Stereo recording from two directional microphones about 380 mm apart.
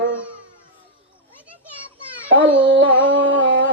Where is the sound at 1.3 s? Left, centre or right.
Centre.